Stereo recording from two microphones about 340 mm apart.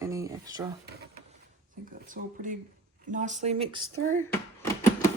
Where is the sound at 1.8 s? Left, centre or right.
Right.